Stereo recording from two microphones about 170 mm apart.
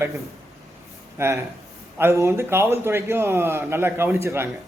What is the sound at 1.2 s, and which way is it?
A man's voice, 15° right (ahead or behind).